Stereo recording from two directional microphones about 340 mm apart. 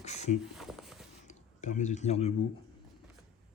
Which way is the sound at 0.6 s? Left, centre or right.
Centre.